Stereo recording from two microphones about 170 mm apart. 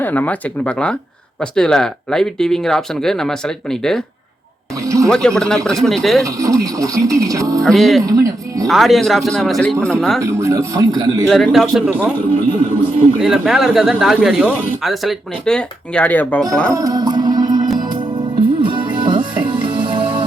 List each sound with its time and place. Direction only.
0.0 s speech: 10° left (ahead or behind)
4.8 s speech: 20° right (ahead or behind)
5.0 s speech: 5° left (ahead or behind)
6.2 s speech: 20° right (ahead or behind)
7.6 s speech: centre (ahead or behind)
8.0 s speech: 20° right (ahead or behind)
8.6 s speech: centre (ahead or behind)
10.2 s speech: 15° right (ahead or behind)
11.3 s speech: centre (ahead or behind)
13.1 s speech: 5° right (ahead or behind)
16.7 s music: 20° right (ahead or behind)